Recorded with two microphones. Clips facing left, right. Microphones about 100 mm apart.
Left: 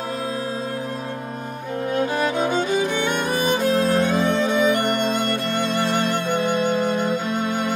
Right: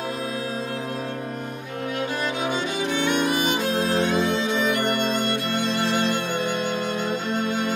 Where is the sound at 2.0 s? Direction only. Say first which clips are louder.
Left 6 dB; 40° left (ahead or behind).